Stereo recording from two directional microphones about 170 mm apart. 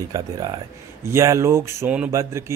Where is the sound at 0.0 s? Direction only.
20° right (ahead or behind).